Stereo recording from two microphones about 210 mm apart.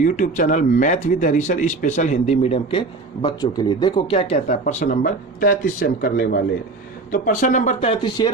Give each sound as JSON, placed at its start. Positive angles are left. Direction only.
{"t": 0.0, "sound": "speech", "side_deg": 40}